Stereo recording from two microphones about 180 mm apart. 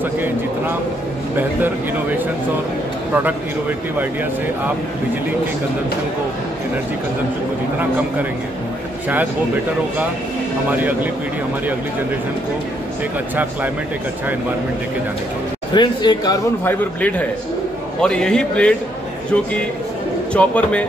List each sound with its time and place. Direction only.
10.7 s speech: 10° right (ahead or behind)
15.7 s speech: 25° left (ahead or behind)
16.6 s a man's voice: 10° left (ahead or behind)
20.3 s speech: 5° left (ahead or behind)